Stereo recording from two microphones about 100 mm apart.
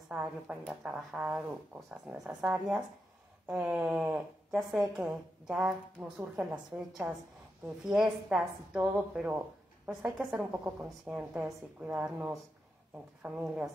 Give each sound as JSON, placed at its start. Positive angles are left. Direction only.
{"t": 0.1, "sound": "a woman's voice", "side_deg": -10}
{"t": 4.6, "sound": "a woman's voice", "side_deg": 0}
{"t": 7.6, "sound": "a woman's voice", "side_deg": -5}